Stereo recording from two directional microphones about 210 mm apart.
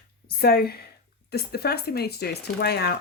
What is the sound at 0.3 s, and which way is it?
Speech, 45° left (ahead or behind).